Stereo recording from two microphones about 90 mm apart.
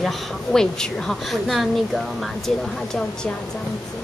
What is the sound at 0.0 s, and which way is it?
A woman's voice, 5° left (ahead or behind).